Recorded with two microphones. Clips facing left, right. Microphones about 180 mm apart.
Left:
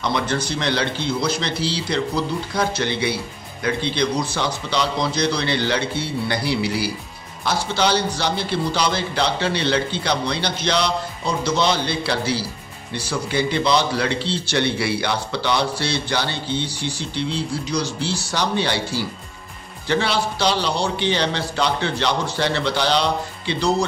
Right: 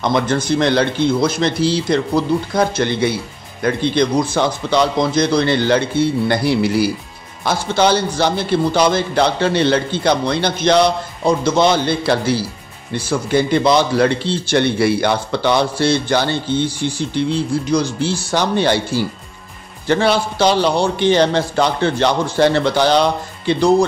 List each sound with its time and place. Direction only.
0.0 s speech: 50° right (ahead or behind)